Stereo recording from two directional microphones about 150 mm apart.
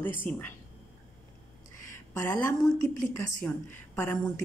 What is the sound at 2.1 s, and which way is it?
A woman's voice, 15° left (ahead or behind).